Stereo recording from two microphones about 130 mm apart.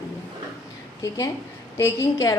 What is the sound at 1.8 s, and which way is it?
Speech, 20° left (ahead or behind).